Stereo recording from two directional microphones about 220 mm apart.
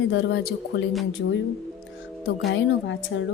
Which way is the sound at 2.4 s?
55° left (ahead or behind).